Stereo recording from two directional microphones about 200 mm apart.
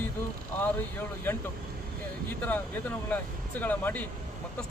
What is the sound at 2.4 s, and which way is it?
Speech, 10° left (ahead or behind).